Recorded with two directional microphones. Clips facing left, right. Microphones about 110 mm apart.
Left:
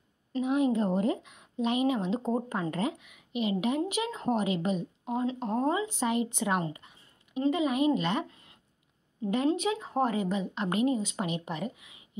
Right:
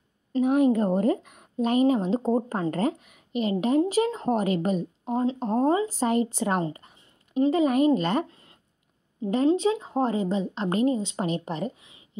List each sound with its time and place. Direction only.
0.4 s a woman's voice: 50° right (ahead or behind)
5.0 s a woman's voice: 30° right (ahead or behind)
9.5 s a woman's voice: 25° right (ahead or behind)